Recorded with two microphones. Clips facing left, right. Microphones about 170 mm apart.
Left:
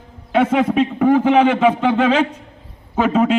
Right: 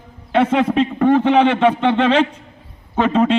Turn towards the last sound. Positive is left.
turn(degrees=5)  # may be behind; listen again after turning